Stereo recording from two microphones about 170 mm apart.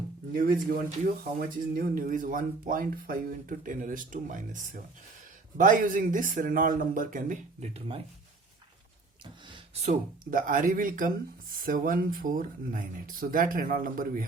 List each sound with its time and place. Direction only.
0.3 s speech: 55° right (ahead or behind); by 8.0 s 35° right (ahead or behind)
9.5 s a sound: 35° right (ahead or behind)
10.3 s speech: 55° right (ahead or behind)